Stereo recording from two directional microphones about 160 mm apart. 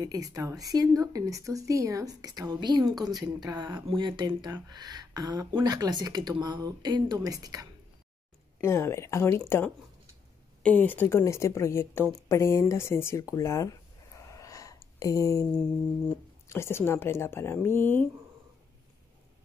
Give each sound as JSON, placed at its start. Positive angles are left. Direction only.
{"t": 0.0, "sound": "speech", "side_deg": -20}
{"t": 2.9, "sound": "a woman's voice", "side_deg": 0}
{"t": 3.2, "sound": "speech", "side_deg": -25}
{"t": 8.5, "sound": "speech", "side_deg": 15}
{"t": 12.3, "sound": "a sound", "side_deg": 15}
{"t": 16.4, "sound": "speech", "side_deg": 15}